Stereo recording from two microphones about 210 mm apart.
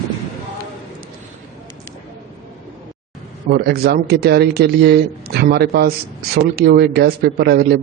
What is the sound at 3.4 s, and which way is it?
A man's voice, 50° right (ahead or behind).